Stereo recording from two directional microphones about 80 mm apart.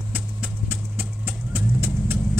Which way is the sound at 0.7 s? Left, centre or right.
Right.